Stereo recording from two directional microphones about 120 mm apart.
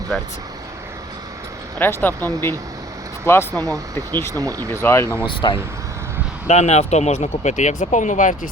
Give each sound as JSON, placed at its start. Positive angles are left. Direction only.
{"t": 1.8, "sound": "speech", "side_deg": 15}
{"t": 4.4, "sound": "speech", "side_deg": -30}
{"t": 4.7, "sound": "speech", "side_deg": 20}
{"t": 5.2, "sound": "speech", "side_deg": 45}
{"t": 6.5, "sound": "speech", "side_deg": 70}